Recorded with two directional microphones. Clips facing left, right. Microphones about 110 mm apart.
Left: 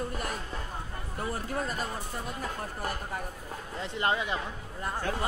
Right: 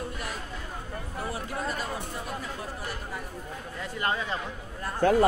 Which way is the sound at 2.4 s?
45° left (ahead or behind).